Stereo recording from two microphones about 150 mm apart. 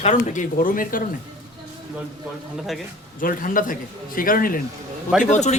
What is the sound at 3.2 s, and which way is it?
Speech, 65° left (ahead or behind).